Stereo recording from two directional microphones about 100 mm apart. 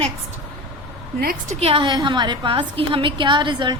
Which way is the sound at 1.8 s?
50° right (ahead or behind).